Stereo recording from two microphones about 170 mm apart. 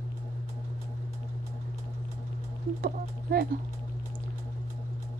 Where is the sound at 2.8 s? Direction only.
65° right (ahead or behind).